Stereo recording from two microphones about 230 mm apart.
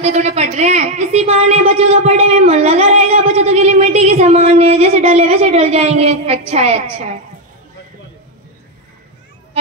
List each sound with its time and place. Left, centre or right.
0.0 s a woman's voice: right